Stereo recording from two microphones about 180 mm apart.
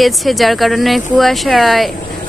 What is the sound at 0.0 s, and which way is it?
Speech, centre (ahead or behind).